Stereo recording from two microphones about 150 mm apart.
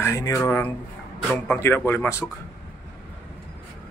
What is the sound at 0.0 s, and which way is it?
Speech, 20° left (ahead or behind).